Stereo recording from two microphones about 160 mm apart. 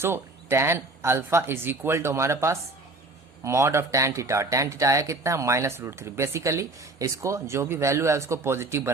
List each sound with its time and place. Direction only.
0.0 s speech: 15° right (ahead or behind)